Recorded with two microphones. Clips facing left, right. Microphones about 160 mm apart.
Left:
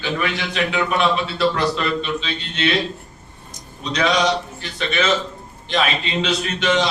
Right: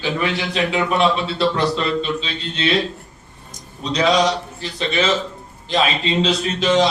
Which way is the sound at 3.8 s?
30° right (ahead or behind).